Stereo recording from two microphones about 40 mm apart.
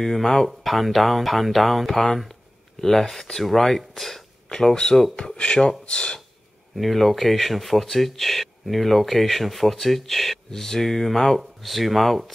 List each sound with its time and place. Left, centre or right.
0.0 s speech: centre; by 6.2 s left
6.7 s speech: centre